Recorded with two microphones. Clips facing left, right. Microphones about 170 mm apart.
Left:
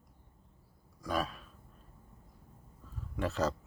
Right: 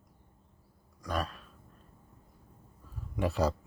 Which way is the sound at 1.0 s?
Centre (ahead or behind).